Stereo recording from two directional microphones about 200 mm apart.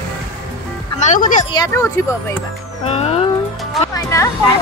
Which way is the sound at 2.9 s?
30° left (ahead or behind).